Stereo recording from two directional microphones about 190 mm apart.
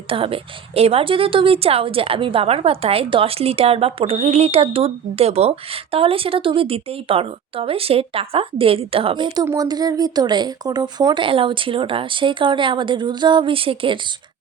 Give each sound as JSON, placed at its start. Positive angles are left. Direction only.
{"t": 0.1, "sound": "a woman's voice", "side_deg": -30}